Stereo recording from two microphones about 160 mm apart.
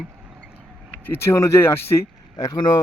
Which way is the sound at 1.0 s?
15° left (ahead or behind).